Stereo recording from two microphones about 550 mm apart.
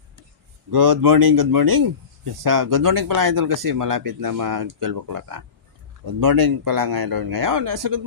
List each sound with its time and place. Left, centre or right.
0.7 s speech: right